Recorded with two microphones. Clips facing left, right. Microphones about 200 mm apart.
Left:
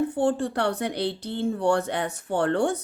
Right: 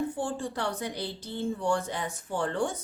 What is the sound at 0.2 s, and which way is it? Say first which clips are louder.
A woman's voice: left 8 dB; 65° left (ahead or behind).